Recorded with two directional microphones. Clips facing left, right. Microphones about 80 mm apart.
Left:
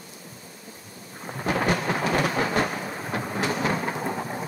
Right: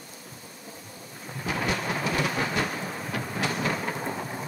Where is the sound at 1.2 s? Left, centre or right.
Left.